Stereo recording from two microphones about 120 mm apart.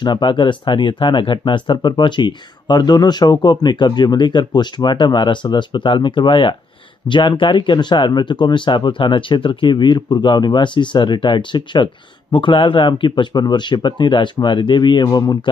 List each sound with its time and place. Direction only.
0.0 s speech: 40° left (ahead or behind)